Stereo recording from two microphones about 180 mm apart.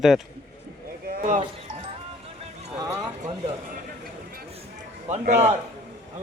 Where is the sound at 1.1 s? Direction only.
45° right (ahead or behind).